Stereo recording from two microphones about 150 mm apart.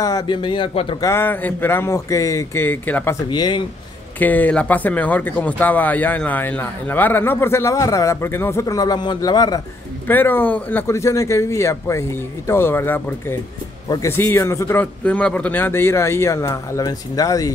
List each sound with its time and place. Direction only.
0.0 s speech: 25° left (ahead or behind)
1.0 s speech: 15° left (ahead or behind)
3.3 s speech: 30° left (ahead or behind)
4.2 s speech: 10° left (ahead or behind)
10.0 s speech: 15° left (ahead or behind)